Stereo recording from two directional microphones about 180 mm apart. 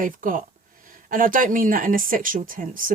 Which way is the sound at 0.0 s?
50° right (ahead or behind).